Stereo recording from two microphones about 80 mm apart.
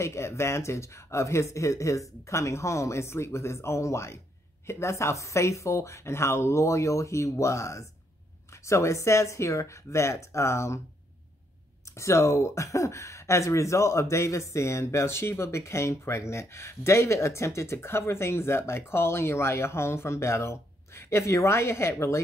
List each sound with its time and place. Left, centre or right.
0.0 s speech: left
11.9 s speech: left